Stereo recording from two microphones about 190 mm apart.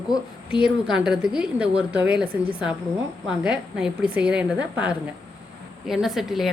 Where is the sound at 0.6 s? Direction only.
5° right (ahead or behind).